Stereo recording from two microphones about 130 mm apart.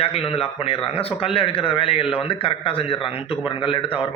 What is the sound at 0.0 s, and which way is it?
A man's voice, 50° left (ahead or behind).